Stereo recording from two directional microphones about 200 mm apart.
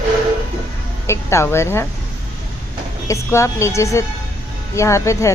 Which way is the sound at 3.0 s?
15° left (ahead or behind).